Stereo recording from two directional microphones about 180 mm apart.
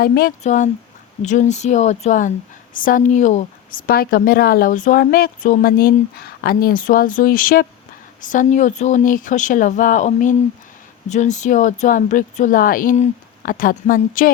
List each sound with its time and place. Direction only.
0.0 s speech: 55° left (ahead or behind)
0.4 s speech: 45° left (ahead or behind)